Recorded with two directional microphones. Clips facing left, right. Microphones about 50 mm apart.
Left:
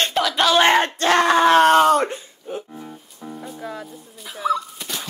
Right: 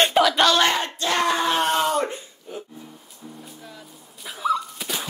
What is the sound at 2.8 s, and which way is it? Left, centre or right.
Music, left.